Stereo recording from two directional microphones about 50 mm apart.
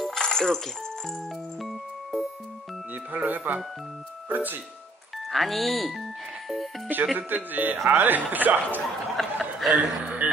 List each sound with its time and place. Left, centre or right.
0.0 s a sound: centre
1.6 s music: centre
2.9 s a man's voice: right
5.3 s speech: centre
7.2 s a man's voice: right
9.1 s speech: centre
9.8 s a man's voice: right